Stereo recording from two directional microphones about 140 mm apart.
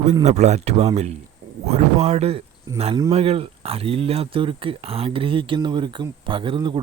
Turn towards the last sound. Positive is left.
turn(degrees=-35)  # may be behind; listen again after turning